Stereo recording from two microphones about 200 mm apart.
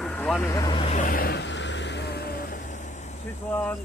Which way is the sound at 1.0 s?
50° left (ahead or behind).